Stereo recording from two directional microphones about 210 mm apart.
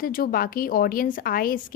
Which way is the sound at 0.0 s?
45° left (ahead or behind).